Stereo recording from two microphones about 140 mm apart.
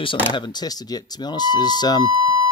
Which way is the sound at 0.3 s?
30° left (ahead or behind).